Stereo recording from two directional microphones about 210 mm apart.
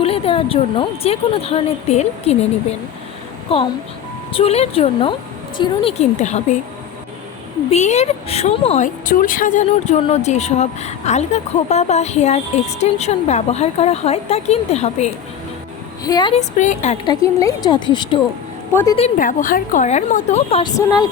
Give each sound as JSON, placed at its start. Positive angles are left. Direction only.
{"t": 0.0, "sound": "a woman's voice", "side_deg": 25}
{"t": 7.7, "sound": "a woman's voice", "side_deg": 30}
{"t": 16.0, "sound": "a woman's voice", "side_deg": 20}
{"t": 16.3, "sound": "a woman's voice", "side_deg": 35}
{"t": 17.1, "sound": "a woman's voice", "side_deg": 20}
{"t": 18.7, "sound": "a woman's voice", "side_deg": 10}
{"t": 18.9, "sound": "a woman's voice", "side_deg": 35}